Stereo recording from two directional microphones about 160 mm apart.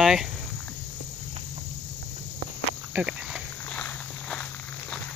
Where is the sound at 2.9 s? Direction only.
5° right (ahead or behind).